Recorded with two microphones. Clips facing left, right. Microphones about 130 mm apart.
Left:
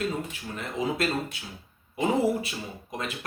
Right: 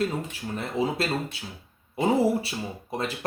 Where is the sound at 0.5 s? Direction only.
30° right (ahead or behind).